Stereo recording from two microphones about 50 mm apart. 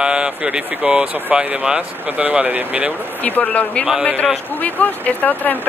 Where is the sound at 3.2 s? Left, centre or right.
Left.